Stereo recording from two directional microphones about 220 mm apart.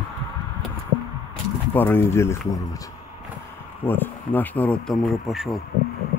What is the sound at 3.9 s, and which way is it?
Speech, 10° left (ahead or behind).